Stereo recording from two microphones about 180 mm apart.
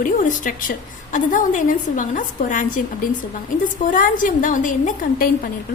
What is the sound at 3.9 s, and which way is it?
A woman's voice, 45° left (ahead or behind).